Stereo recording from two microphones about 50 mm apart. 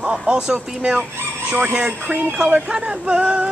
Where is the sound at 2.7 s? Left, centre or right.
Right.